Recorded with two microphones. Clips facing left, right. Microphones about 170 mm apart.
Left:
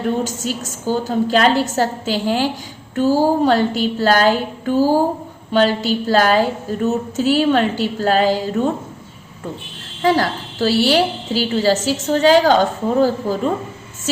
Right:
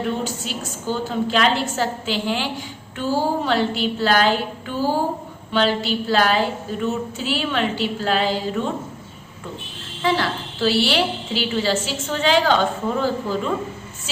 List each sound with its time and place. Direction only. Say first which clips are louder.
0.3 s a woman's voice: left 4 dB; 45° left (ahead or behind)
10.0 s a woman's voice: left 5 dB; 40° left (ahead or behind)